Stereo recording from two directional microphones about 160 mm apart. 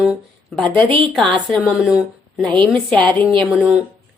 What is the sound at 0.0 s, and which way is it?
A woman's voice, centre (ahead or behind).